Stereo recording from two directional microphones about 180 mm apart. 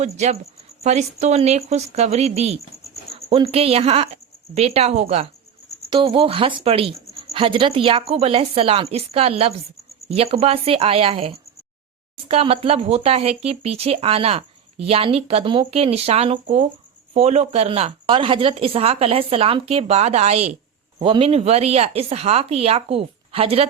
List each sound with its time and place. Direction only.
0.0 s speech: 35° right (ahead or behind)